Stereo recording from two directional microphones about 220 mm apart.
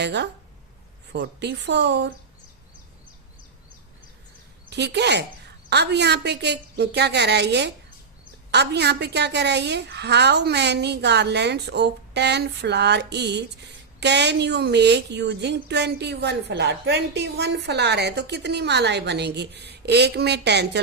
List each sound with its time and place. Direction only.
0.0 s a woman's voice: 50° right (ahead or behind)
4.7 s a woman's voice: 50° right (ahead or behind)